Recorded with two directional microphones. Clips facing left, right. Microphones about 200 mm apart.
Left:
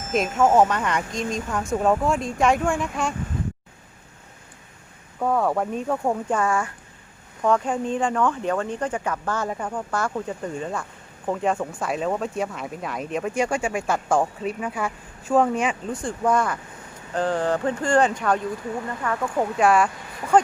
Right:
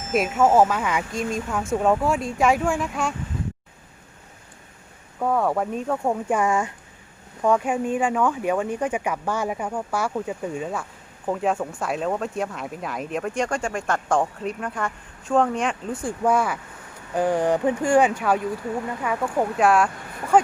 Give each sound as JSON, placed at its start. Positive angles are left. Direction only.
{"t": 0.0, "sound": "speech", "side_deg": 0}
{"t": 5.2, "sound": "speech", "side_deg": 0}
{"t": 6.2, "sound": "speech", "side_deg": -15}
{"t": 16.0, "sound": "speech", "side_deg": -10}